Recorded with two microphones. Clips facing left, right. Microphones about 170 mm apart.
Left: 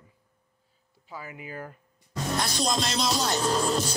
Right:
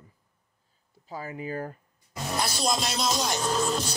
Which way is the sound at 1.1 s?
40° right (ahead or behind).